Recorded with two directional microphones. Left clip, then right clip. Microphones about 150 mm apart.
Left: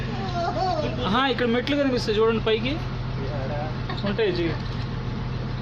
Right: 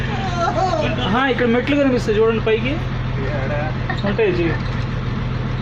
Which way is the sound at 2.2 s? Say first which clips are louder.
Right 5 dB; 20° left (ahead or behind).